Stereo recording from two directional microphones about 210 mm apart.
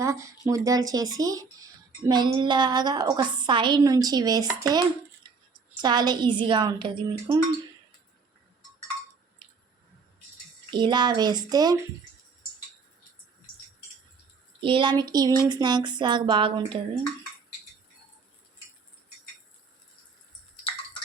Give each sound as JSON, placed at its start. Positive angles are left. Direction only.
{"t": 0.0, "sound": "speech", "side_deg": -15}
{"t": 5.2, "sound": "a sound", "side_deg": -20}
{"t": 5.8, "sound": "speech", "side_deg": -20}
{"t": 9.4, "sound": "squish", "side_deg": -20}
{"t": 10.7, "sound": "speech", "side_deg": -20}
{"t": 14.6, "sound": "speech", "side_deg": -25}